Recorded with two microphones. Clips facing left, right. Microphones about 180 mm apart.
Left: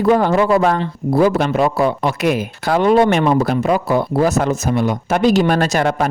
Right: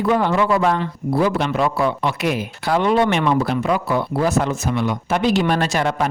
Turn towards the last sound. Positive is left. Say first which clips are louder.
# left 3 dB
turn(degrees=45)  # may be behind; listen again after turning